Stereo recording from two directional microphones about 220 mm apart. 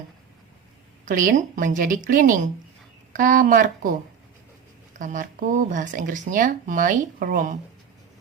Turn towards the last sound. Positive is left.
turn(degrees=-35)  # may be behind; listen again after turning